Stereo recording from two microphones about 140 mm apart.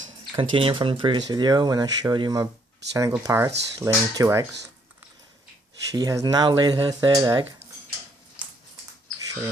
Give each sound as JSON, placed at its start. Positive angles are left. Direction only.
{"t": 0.3, "sound": "speech", "side_deg": -40}
{"t": 5.9, "sound": "speech", "side_deg": -25}